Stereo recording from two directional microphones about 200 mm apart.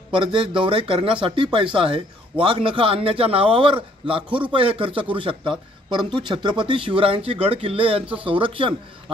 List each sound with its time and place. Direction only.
0.1 s speech: 25° right (ahead or behind)